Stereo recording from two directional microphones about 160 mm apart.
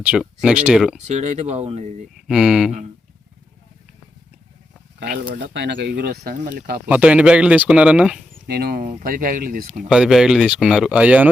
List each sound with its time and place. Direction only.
0.0 s speech: 5° right (ahead or behind)
1.0 s speech: 45° right (ahead or behind)
2.2 s speech: 5° right (ahead or behind)
4.9 s speech: 70° right (ahead or behind)
6.8 s speech: 10° right (ahead or behind)
8.4 s speech: 75° right (ahead or behind)
9.9 s speech: 5° right (ahead or behind)